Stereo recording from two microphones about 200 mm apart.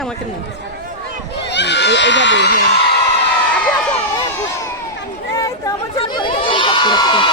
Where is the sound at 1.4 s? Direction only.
60° left (ahead or behind).